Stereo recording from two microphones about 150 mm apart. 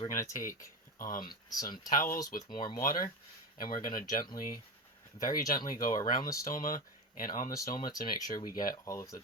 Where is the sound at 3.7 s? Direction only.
65° left (ahead or behind).